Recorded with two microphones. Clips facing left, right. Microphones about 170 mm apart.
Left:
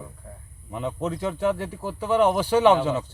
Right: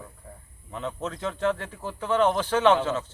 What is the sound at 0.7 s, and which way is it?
Speech, 10° left (ahead or behind).